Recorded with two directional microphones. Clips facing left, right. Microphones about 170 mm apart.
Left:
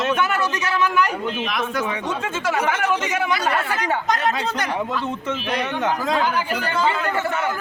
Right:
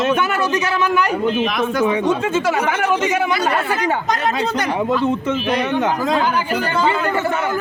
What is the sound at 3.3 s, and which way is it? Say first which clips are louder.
Speech: right 3 dB; 20° right (ahead or behind).